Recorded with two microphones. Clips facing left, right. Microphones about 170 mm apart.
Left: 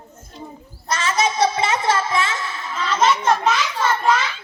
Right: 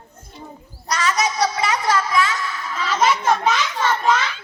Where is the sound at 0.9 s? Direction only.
25° left (ahead or behind).